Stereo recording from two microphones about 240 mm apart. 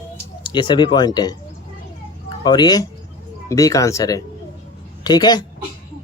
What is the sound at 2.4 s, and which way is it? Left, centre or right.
A woman's voice, centre.